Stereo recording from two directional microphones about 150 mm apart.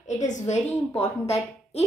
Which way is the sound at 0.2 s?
50° left (ahead or behind).